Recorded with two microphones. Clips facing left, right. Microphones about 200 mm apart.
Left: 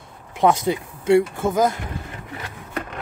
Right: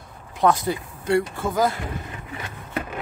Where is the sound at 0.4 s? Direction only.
20° left (ahead or behind).